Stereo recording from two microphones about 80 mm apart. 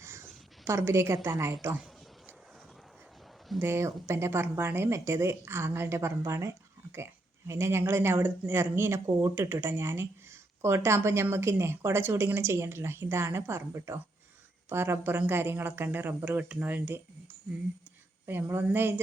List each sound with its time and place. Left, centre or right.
0.0 s a sound: right
0.6 s speech: right
3.6 s speech: right
18.3 s speech: right